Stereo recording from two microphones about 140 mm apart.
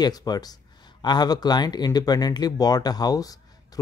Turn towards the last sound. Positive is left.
turn(degrees=25)  # may be behind; listen again after turning